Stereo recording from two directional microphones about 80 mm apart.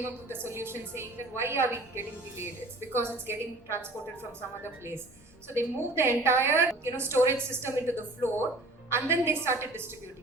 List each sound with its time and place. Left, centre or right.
0.3 s a woman's voice: right
5.5 s a woman's voice: right